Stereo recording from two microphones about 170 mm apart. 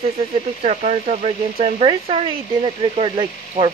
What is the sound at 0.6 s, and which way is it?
Speech, 40° right (ahead or behind).